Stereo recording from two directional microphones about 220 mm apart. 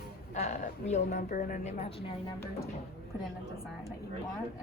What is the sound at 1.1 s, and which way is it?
Speech, 40° left (ahead or behind).